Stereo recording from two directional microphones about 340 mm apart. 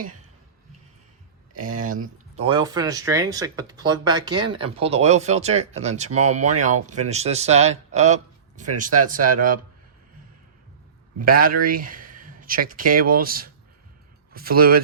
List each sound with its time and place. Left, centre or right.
1.5 s a man's voice: right
11.2 s a man's voice: right